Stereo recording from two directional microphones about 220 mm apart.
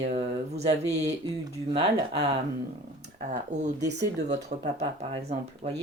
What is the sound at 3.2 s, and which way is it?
Speech, 35° right (ahead or behind).